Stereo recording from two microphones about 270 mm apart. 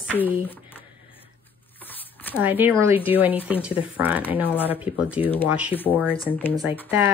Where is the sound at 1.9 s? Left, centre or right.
Centre.